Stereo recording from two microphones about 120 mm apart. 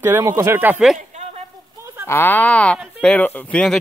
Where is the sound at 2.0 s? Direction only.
20° left (ahead or behind).